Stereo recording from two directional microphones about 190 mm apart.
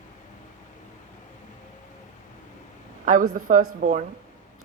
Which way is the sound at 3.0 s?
45° right (ahead or behind).